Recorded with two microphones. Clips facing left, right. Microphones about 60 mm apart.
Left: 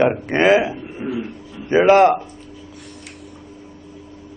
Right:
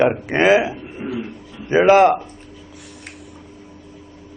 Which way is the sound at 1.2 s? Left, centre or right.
Centre.